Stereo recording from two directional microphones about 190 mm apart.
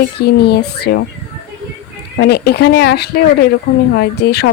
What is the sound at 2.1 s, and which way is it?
Speech, 60° left (ahead or behind).